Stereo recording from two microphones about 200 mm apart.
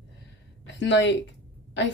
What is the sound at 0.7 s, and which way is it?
Speech, 65° left (ahead or behind).